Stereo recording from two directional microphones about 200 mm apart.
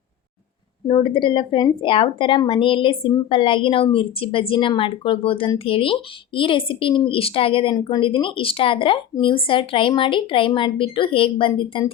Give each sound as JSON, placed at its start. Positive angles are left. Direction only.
{"t": 0.9, "sound": "speech", "side_deg": 25}